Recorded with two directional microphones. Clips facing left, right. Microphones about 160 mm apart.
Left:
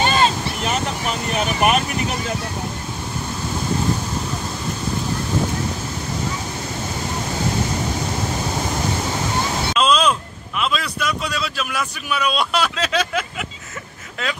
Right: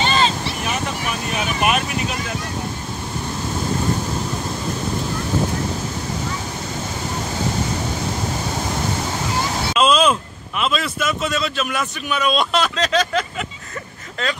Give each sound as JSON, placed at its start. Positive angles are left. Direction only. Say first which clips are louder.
{"t": 0.0, "sound": "boat", "louder": "left 1 dB", "side_deg": 50}
{"t": 9.8, "sound": "a sound", "louder": "right 2 dB", "side_deg": -5}
{"t": 10.6, "sound": "speech", "louder": "right 1 dB", "side_deg": 0}